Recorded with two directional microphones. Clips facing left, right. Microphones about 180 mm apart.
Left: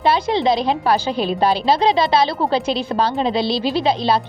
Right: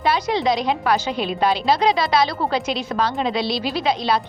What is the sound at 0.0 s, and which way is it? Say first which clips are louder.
Speech: left 3 dB; 30° left (ahead or behind).